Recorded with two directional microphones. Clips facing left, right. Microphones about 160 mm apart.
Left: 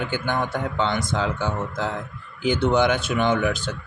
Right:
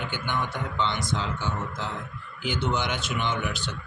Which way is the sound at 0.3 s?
45° left (ahead or behind).